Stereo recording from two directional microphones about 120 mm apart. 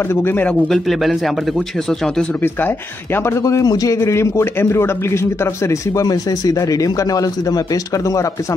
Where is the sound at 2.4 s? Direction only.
20° left (ahead or behind).